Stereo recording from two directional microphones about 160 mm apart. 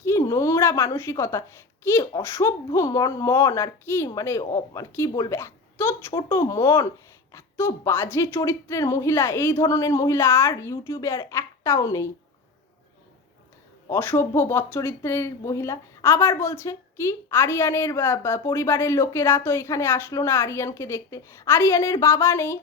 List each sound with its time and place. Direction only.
0.0 s a woman's voice: 20° left (ahead or behind)
13.9 s a woman's voice: 15° left (ahead or behind)